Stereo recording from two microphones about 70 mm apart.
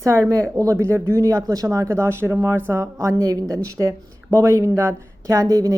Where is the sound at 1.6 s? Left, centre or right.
Right.